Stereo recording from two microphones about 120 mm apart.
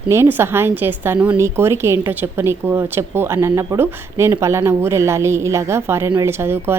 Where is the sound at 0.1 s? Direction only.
20° right (ahead or behind).